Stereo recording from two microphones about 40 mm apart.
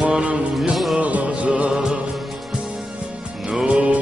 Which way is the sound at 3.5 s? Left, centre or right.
Right.